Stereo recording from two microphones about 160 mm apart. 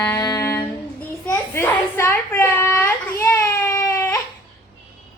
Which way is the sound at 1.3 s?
15° left (ahead or behind).